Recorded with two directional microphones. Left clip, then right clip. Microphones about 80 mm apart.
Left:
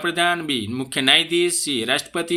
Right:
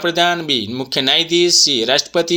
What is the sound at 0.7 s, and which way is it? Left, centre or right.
Speech, centre.